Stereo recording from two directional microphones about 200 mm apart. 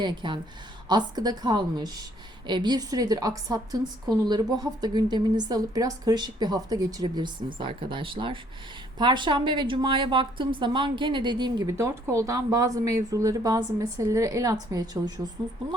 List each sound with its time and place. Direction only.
0.0 s a woman's voice: 25° right (ahead or behind)